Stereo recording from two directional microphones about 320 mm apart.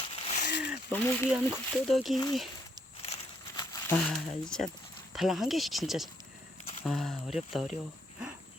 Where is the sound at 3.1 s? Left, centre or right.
Centre.